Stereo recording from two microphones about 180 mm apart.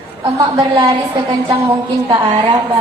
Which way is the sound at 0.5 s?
25° right (ahead or behind).